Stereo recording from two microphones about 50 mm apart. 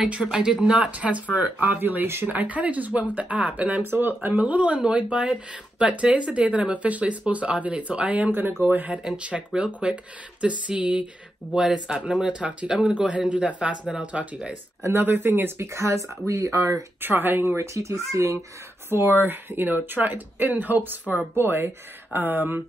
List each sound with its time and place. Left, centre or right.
0.2 s speech: centre; by 3.8 s right
3.8 s speech: right
4.2 s speech: right
8.3 s speech: right
9.1 s speech: right
15.0 s speech: right
15.6 s speech: right
16.3 s speech: right
17.0 s speech: right
17.6 s speech: right
18.9 s speech: right
21.4 s speech: right